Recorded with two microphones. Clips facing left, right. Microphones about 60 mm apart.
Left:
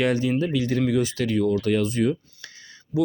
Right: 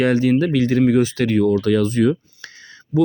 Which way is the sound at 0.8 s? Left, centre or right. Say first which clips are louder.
Right 6 dB; right.